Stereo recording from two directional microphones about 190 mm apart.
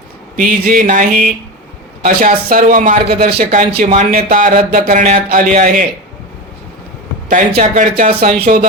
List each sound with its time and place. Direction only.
0.3 s speech: 45° right (ahead or behind)
7.3 s speech: 40° right (ahead or behind)